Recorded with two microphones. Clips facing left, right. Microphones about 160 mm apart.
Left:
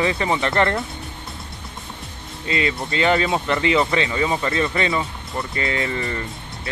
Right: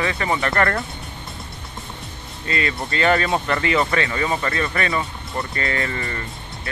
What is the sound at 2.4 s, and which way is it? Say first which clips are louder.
Speech: left 2 dB; 20° left (ahead or behind).